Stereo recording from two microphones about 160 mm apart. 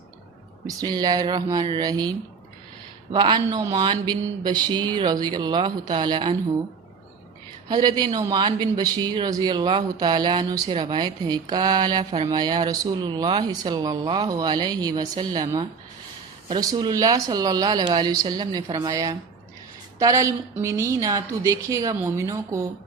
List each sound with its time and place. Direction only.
0.8 s speech: 25° right (ahead or behind)
7.7 s speech: 25° right (ahead or behind)